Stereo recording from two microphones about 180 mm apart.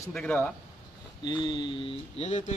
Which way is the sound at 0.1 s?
5° left (ahead or behind).